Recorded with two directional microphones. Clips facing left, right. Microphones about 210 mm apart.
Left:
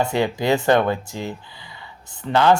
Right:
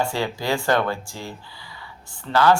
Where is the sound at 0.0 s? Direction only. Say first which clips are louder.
Left 4 dB; 20° left (ahead or behind).